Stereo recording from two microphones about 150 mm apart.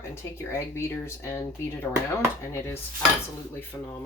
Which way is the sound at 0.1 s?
15° left (ahead or behind).